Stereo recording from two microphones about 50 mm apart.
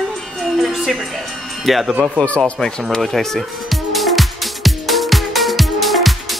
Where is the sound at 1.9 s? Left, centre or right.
Right.